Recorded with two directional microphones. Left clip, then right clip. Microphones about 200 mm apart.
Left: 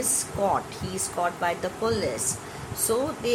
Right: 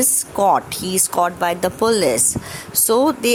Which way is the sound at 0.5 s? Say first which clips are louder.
Right 9 dB; 45° right (ahead or behind).